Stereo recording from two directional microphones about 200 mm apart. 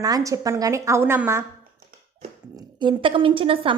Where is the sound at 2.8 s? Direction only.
25° right (ahead or behind).